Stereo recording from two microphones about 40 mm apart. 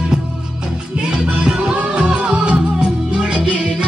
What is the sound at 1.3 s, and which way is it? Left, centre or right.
Music, right.